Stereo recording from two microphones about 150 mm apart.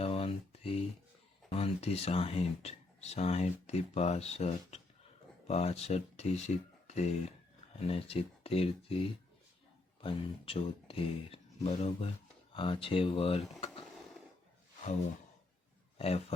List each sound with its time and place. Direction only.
0.0 s a sound: 40° left (ahead or behind)
1.5 s speech: 45° left (ahead or behind)
6.8 s a sound: 50° left (ahead or behind)
7.8 s speech: 40° left (ahead or behind)
10.0 s speech: 35° left (ahead or behind)
16.0 s a man's voice: 45° left (ahead or behind)